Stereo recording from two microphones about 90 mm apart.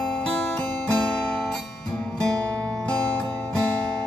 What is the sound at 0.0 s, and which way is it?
Music, 10° left (ahead or behind).